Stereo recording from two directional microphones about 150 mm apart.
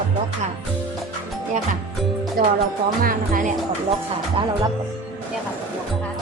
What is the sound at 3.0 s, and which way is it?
Speech, 70° right (ahead or behind).